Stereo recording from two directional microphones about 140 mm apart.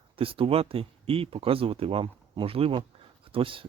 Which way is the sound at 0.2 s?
40° right (ahead or behind).